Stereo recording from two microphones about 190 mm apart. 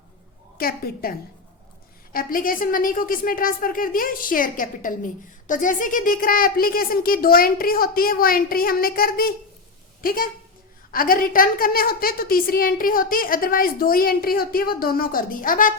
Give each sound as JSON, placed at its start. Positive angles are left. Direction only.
{"t": 2.1, "sound": "a woman's voice", "side_deg": 50}